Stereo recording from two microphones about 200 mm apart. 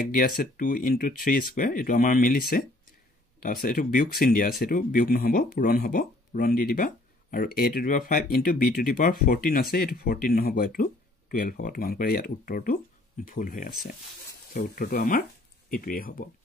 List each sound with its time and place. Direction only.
0.1 s speech: 45° left (ahead or behind)